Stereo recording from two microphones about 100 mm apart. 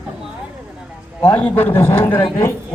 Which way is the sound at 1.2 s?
15° left (ahead or behind).